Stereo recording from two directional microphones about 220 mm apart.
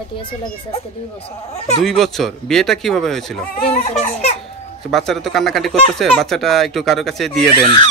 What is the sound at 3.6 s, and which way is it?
Speech, 30° left (ahead or behind).